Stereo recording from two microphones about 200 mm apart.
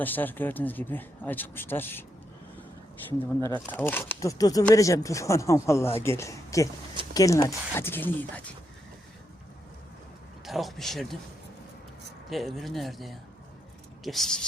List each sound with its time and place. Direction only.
0.0 s speech: 10° left (ahead or behind)
3.4 s speech: 10° left (ahead or behind)
10.4 s speech: centre (ahead or behind)
12.3 s speech: centre (ahead or behind)